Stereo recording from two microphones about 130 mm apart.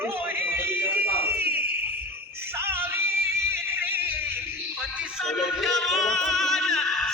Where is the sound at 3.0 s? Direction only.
15° right (ahead or behind).